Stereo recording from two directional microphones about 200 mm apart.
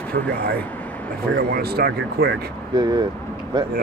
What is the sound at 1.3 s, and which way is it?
Speech, 50° right (ahead or behind).